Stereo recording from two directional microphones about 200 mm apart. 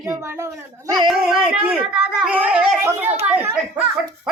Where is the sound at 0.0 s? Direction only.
15° right (ahead or behind).